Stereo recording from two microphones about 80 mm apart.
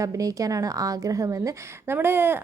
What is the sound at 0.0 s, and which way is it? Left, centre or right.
A woman's voice, right.